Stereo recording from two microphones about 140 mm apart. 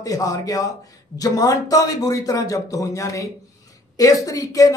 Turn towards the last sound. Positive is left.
turn(degrees=25)  # may be behind; listen again after turning